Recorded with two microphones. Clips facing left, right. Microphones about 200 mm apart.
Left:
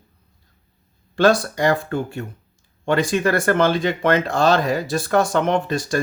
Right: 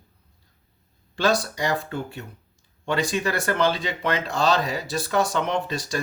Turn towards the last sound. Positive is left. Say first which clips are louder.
# left 6 dB
turn(degrees=50)  # may be behind; listen again after turning